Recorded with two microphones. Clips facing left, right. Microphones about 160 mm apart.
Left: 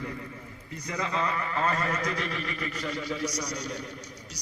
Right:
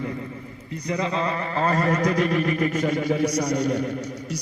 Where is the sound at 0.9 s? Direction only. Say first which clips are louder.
Right 5 dB; 30° right (ahead or behind); by 3.8 s 60° right (ahead or behind).